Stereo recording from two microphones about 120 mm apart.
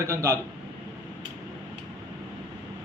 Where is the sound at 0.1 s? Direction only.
25° right (ahead or behind).